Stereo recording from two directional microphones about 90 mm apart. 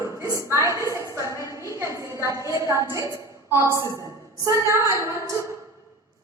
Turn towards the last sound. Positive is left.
turn(degrees=-35)  # may be behind; listen again after turning